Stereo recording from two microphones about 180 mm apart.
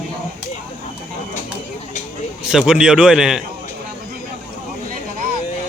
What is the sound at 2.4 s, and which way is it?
A man's voice, centre (ahead or behind).